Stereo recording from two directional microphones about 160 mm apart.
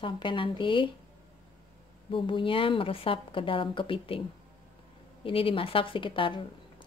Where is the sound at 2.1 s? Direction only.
30° left (ahead or behind).